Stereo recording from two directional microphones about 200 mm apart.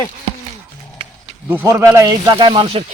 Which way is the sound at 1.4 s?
10° right (ahead or behind).